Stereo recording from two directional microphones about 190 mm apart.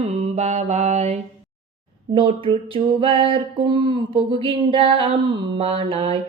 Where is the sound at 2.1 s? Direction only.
25° right (ahead or behind).